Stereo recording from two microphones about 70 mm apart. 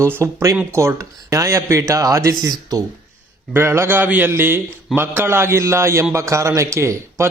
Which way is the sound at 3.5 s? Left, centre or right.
Right.